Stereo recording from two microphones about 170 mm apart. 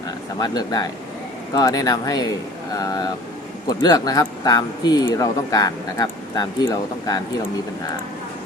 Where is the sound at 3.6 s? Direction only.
20° left (ahead or behind).